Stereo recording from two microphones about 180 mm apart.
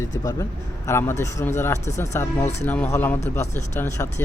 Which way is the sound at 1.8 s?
40° left (ahead or behind).